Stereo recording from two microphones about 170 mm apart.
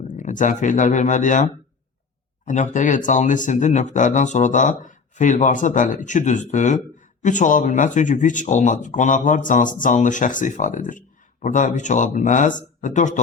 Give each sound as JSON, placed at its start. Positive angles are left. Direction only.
{"t": 0.1, "sound": "speech", "side_deg": 50}
{"t": 2.5, "sound": "speech", "side_deg": 45}